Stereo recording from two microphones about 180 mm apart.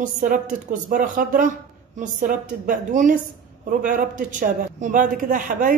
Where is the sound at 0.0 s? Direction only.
45° right (ahead or behind).